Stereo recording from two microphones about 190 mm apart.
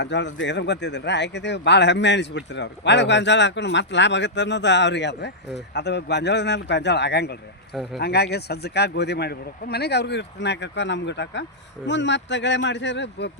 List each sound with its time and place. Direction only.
0.0 s speech: 65° left (ahead or behind)